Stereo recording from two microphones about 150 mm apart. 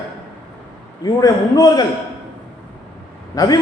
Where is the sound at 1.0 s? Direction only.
25° left (ahead or behind).